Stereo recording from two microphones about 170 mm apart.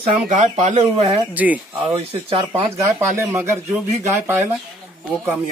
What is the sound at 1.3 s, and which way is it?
Speech, 10° right (ahead or behind).